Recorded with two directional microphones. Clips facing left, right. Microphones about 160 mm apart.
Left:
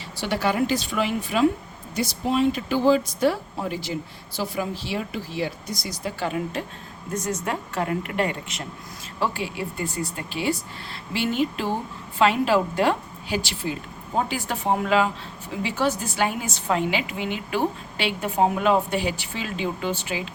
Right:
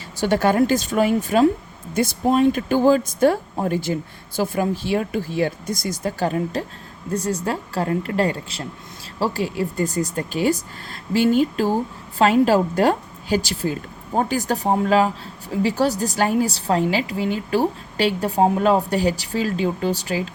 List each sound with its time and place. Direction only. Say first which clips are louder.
0.2 s a woman's voice: right 6 dB; 45° right (ahead or behind)